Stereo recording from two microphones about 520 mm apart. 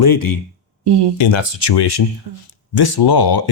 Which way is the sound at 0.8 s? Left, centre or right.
Right.